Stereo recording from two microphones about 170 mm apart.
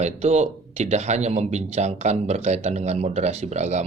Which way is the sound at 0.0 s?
40° right (ahead or behind).